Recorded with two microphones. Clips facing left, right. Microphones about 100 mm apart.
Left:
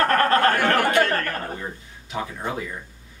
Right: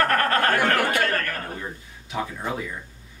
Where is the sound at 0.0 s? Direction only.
25° left (ahead or behind).